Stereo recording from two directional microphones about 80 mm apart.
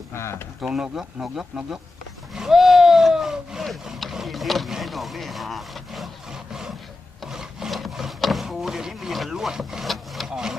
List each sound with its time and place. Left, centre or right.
0.1 s speech: left
0.6 s speech: centre
2.3 s a sound: centre
7.2 s wood: centre